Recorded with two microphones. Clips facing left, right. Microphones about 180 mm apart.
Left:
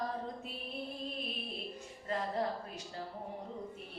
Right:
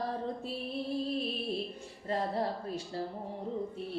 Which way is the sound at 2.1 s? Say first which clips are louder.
Right 3 dB; 35° right (ahead or behind).